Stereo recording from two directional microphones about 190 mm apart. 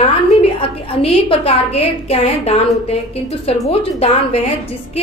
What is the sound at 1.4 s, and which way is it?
A woman's voice, 35° left (ahead or behind).